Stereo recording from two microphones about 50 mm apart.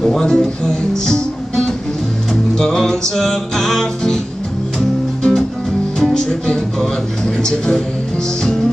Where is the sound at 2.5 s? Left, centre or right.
Centre.